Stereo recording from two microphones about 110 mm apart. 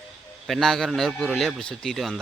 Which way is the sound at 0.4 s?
Centre (ahead or behind).